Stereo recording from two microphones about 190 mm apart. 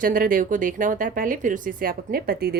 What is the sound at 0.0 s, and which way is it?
Speech, 45° right (ahead or behind).